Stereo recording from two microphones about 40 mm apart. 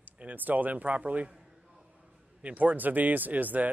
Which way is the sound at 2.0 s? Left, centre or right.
Right.